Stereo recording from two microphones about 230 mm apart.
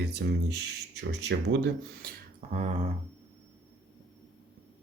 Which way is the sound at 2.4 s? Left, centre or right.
Right.